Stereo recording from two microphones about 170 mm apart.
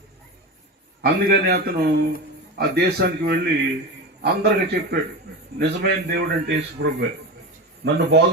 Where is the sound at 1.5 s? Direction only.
70° right (ahead or behind).